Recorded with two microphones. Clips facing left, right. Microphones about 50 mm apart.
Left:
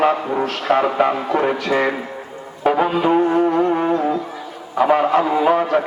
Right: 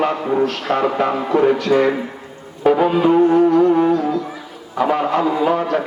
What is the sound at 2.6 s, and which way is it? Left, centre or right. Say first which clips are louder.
Music: right 2 dB; centre.